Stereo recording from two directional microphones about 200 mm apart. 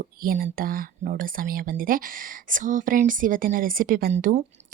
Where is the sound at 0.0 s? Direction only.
45° right (ahead or behind).